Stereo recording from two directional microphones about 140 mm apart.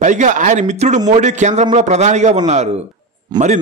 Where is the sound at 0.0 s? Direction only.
60° right (ahead or behind).